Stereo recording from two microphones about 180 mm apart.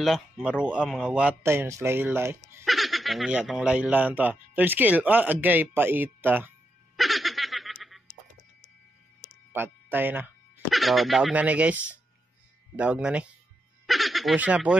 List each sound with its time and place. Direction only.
0.0 s speech: centre (ahead or behind)
2.6 s speech: centre (ahead or behind)
7.0 s snicker: centre (ahead or behind)
9.5 s speech: 10° right (ahead or behind)
10.7 s speech: centre (ahead or behind)